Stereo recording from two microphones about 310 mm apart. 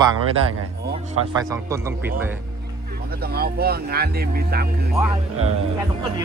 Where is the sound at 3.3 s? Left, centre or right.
Right.